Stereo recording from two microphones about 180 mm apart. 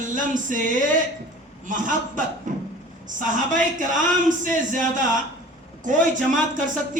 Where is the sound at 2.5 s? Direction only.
45° right (ahead or behind).